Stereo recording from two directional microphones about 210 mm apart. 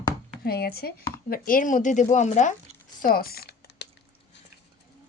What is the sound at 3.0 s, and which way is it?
Typing, 45° left (ahead or behind).